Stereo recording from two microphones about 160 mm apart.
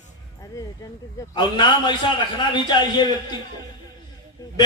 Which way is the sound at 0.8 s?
20° left (ahead or behind).